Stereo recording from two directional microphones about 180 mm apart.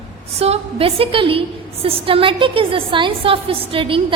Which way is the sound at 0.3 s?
35° right (ahead or behind).